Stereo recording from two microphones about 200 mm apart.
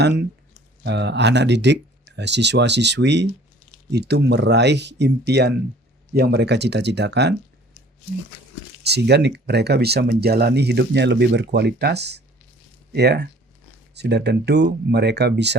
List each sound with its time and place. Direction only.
0.9 s speech: 60° right (ahead or behind)
8.8 s speech: 55° right (ahead or behind)